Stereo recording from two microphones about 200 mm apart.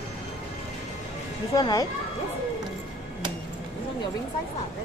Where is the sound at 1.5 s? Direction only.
20° left (ahead or behind).